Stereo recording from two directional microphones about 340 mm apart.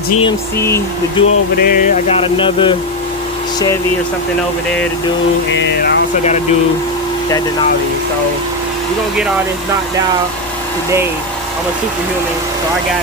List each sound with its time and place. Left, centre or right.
0.2 s speech: centre
1.6 s speech: left
5.5 s speech: left